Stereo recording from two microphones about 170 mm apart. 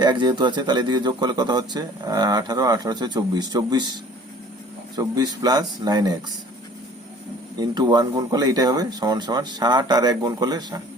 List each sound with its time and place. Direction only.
0.0 s a man's voice: 25° right (ahead or behind)
4.9 s a man's voice: 25° right (ahead or behind)
7.6 s a man's voice: 25° right (ahead or behind)